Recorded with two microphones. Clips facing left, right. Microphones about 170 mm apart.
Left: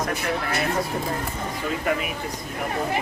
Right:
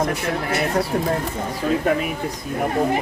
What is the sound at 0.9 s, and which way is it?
Speech, 75° right (ahead or behind).